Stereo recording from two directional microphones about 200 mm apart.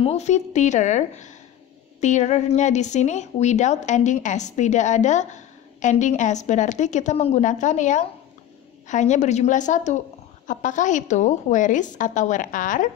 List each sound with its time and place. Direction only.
0.0 s a woman's voice: 35° left (ahead or behind)